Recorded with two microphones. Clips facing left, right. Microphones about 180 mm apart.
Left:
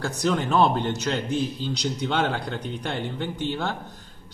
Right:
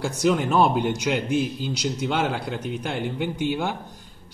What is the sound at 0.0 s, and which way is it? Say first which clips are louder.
A man's voice: right 3 dB; 10° right (ahead or behind).